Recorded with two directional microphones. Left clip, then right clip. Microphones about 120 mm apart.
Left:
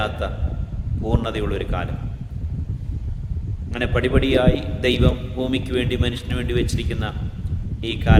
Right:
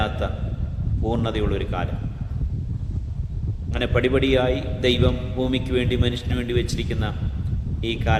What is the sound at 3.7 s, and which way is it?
A man's voice, 10° left (ahead or behind).